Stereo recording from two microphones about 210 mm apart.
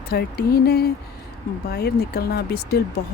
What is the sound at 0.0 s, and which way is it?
Speech, 50° left (ahead or behind).